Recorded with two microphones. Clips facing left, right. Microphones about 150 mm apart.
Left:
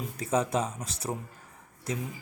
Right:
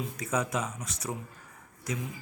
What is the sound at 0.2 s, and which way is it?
Speech, 30° left (ahead or behind).